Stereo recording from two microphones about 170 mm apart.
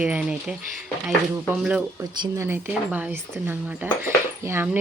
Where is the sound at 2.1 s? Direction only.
25° right (ahead or behind).